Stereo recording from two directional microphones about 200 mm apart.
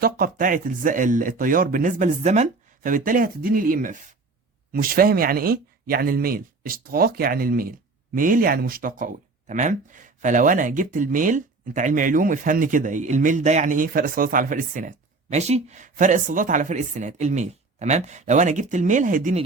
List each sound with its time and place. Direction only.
0.0 s speech: 45° right (ahead or behind)